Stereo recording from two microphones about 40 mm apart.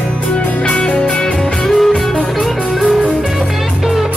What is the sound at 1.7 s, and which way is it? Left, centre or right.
Music, centre.